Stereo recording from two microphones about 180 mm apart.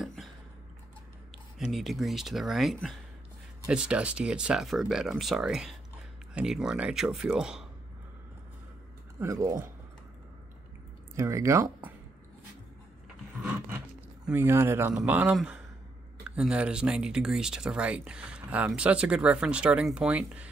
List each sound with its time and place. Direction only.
0.0 s a sound: centre (ahead or behind)
1.6 s speech: centre (ahead or behind)
9.2 s speech: 15° right (ahead or behind)
11.1 s speech: 15° right (ahead or behind)
14.2 s speech: 15° right (ahead or behind)